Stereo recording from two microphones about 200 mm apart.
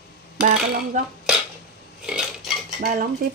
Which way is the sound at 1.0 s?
35° right (ahead or behind).